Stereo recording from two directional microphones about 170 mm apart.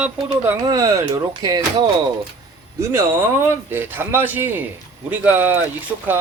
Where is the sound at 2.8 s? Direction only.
15° right (ahead or behind).